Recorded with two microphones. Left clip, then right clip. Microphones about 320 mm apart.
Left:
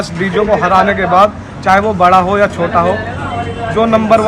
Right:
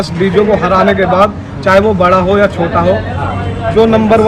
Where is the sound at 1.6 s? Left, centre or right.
Centre.